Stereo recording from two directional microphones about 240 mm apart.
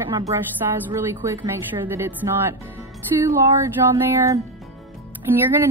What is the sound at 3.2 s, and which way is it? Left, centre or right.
Speech, centre.